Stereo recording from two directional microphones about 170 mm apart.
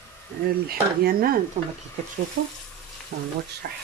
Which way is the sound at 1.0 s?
60° right (ahead or behind).